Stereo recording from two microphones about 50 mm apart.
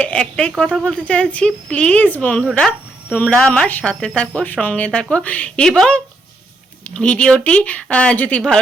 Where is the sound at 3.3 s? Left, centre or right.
Centre.